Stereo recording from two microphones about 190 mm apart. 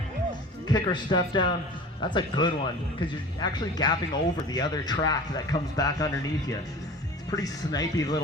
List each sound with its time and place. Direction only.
0.7 s speech: 25° left (ahead or behind)
7.3 s speech: 20° left (ahead or behind)